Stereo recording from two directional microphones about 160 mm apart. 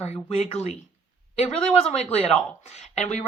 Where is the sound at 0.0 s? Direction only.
40° left (ahead or behind).